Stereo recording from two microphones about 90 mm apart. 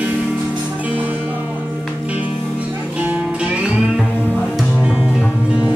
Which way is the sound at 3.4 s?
10° right (ahead or behind).